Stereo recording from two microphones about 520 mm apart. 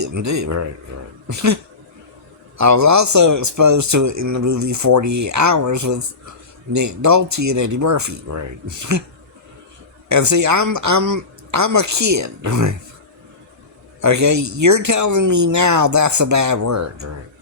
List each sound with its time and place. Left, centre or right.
0.0 s a man's voice: right
2.6 s a man's voice: right
10.1 s a man's voice: right
14.0 s a man's voice: right